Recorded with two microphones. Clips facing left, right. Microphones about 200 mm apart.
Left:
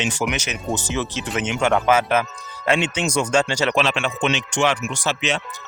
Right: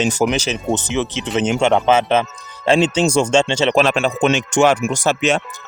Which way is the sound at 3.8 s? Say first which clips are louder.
Right 6 dB; 45° right (ahead or behind).